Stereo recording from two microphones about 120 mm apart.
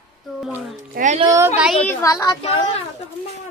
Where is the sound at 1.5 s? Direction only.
10° right (ahead or behind).